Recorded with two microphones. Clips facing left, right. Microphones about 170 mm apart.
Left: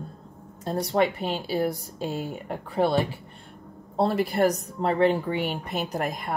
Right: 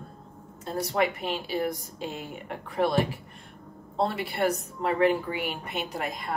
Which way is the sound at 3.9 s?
40° left (ahead or behind).